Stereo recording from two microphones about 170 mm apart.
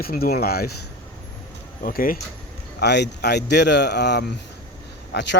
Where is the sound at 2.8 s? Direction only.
80° left.